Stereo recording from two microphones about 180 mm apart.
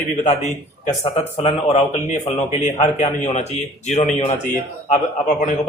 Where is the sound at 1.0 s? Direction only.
35° left (ahead or behind).